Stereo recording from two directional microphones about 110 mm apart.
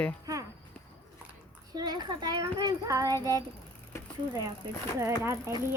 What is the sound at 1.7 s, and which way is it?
Child singing, 40° right (ahead or behind).